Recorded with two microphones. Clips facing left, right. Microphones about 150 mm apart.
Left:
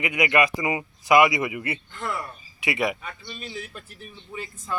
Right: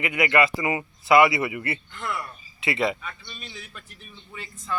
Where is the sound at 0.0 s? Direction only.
20° left (ahead or behind).